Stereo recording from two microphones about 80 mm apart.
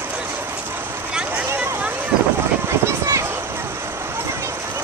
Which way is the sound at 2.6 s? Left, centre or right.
Right.